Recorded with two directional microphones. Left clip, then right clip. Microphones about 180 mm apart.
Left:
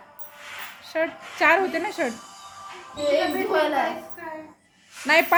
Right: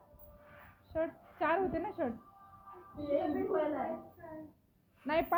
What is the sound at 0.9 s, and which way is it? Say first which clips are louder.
Speech: left 11 dB; 20° left (ahead or behind).